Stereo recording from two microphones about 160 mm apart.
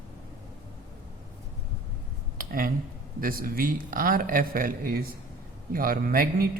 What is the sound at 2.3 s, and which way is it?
Dishes, 60° right (ahead or behind).